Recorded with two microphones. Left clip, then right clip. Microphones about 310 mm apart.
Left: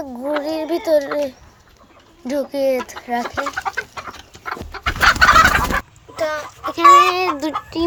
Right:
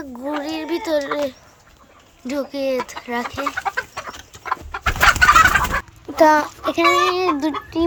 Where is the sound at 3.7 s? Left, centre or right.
Right.